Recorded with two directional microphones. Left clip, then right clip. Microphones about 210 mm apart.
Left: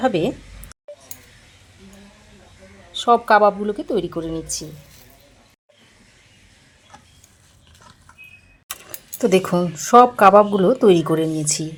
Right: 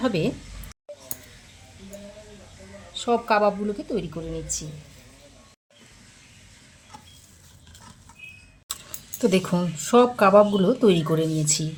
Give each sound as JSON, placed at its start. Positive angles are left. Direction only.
{"t": 0.0, "sound": "speech", "side_deg": 25}
{"t": 2.9, "sound": "speech", "side_deg": 25}
{"t": 9.1, "sound": "speech", "side_deg": 30}